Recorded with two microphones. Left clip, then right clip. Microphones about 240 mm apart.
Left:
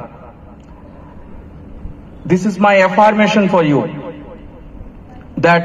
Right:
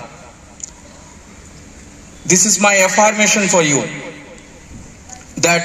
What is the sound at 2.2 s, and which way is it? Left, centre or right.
A man's voice, centre.